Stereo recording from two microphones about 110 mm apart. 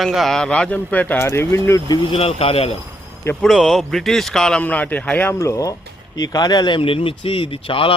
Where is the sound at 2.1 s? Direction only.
60° left (ahead or behind).